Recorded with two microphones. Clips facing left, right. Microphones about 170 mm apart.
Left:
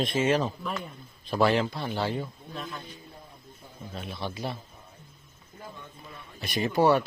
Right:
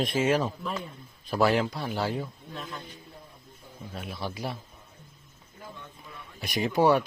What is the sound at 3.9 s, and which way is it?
Speech, 5° right (ahead or behind).